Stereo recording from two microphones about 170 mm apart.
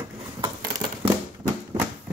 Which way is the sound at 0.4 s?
15° right (ahead or behind).